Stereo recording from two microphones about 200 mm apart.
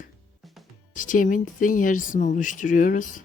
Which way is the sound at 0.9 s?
40° left (ahead or behind).